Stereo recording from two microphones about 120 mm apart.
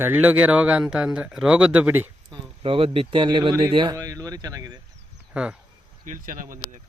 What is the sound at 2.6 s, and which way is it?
Speech, 50° right (ahead or behind).